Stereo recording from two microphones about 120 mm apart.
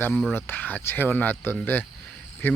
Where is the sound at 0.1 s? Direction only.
Centre (ahead or behind).